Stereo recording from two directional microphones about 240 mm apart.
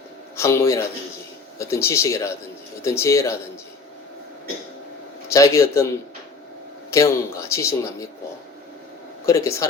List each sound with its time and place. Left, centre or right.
0.3 s speech: centre
5.3 s speech: centre
6.9 s speech: centre
9.2 s speech: centre